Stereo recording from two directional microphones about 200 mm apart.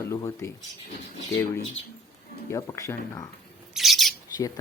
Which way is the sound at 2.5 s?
15° left (ahead or behind).